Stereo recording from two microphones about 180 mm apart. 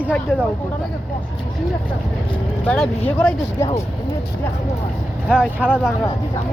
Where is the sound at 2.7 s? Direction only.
5° left (ahead or behind).